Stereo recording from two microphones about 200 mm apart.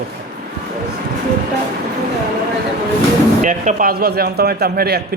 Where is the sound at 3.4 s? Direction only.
40° right (ahead or behind).